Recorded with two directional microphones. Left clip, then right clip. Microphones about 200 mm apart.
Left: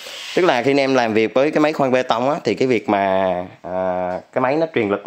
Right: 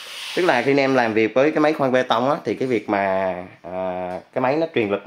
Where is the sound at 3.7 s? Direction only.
30° left (ahead or behind).